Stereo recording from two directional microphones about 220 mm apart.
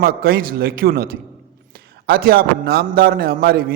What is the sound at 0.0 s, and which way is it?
A man's voice, 45° right (ahead or behind).